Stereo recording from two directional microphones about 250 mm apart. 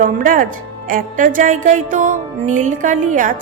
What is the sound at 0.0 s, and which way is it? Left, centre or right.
Music, right.